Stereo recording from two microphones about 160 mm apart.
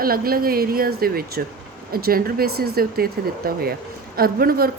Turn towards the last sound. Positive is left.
turn(degrees=-70)  # may be behind; listen again after turning